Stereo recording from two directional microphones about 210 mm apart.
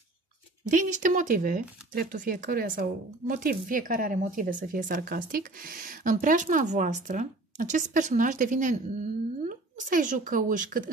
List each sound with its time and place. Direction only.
0.7 s a woman's voice: 35° right (ahead or behind)